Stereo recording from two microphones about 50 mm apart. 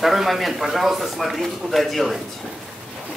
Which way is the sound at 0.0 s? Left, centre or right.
Centre.